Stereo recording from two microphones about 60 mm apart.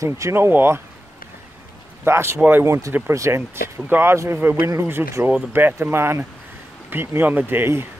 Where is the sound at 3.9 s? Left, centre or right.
Right.